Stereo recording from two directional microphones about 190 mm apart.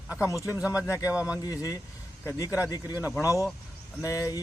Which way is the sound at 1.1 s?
5° right (ahead or behind).